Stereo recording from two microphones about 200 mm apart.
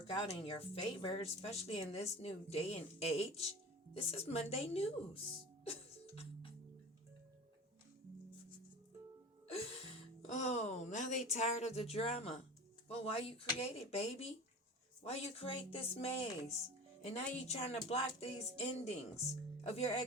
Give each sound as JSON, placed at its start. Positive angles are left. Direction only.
{"t": 0.1, "sound": "speech", "side_deg": 25}
{"t": 10.2, "sound": "speech", "side_deg": 35}